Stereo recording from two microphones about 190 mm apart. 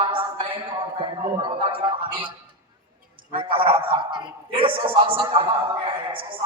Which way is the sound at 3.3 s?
30° right (ahead or behind).